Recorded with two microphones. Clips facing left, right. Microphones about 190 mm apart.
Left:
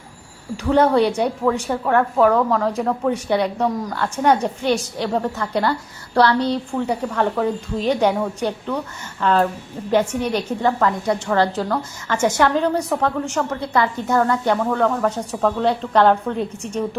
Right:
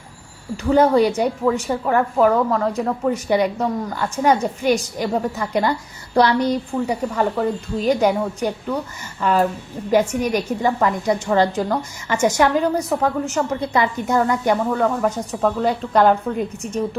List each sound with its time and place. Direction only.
0.5 s a woman's voice: 5° right (ahead or behind)